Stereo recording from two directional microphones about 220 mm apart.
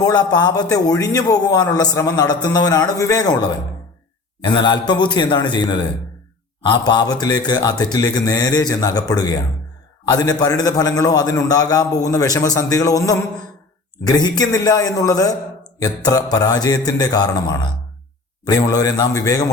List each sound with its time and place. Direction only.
0.0 s a man's voice: 20° left (ahead or behind)